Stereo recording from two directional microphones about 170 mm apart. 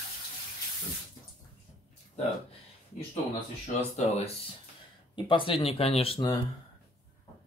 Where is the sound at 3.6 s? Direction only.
40° left (ahead or behind).